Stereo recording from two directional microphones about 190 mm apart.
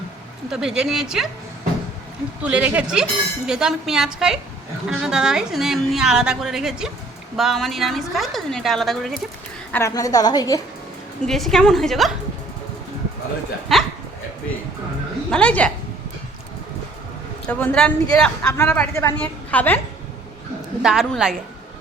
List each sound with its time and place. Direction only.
0.5 s a woman's voice: 5° right (ahead or behind)
2.4 s a woman's voice: 5° right (ahead or behind)
9.7 s a woman's voice: 15° left (ahead or behind)
11.3 s a woman's voice: centre (ahead or behind)
13.7 s speech: centre (ahead or behind)
15.3 s a man's voice: 5° left (ahead or behind)
17.5 s a man's voice: 5° left (ahead or behind)
20.8 s a woman's voice: centre (ahead or behind)